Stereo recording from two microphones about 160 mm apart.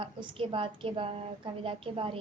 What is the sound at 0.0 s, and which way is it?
A woman's voice, 30° right (ahead or behind).